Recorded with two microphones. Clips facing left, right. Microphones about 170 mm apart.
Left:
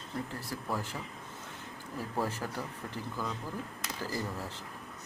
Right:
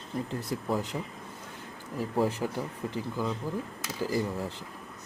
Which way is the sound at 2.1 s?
15° right (ahead or behind).